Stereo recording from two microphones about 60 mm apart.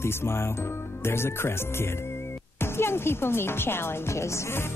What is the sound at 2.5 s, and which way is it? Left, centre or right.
Speech, left.